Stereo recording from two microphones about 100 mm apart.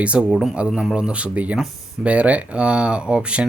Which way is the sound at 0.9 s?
10° right (ahead or behind).